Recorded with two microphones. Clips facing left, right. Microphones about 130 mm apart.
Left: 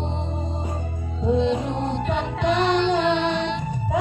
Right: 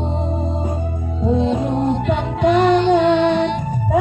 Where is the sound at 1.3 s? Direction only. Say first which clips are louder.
Right 4 dB; 40° right (ahead or behind).